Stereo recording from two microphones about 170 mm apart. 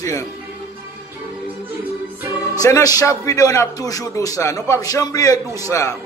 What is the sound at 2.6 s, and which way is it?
A man's voice, 20° left (ahead or behind).